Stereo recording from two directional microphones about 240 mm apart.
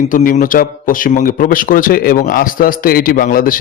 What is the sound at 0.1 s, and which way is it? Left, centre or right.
A man's voice, left.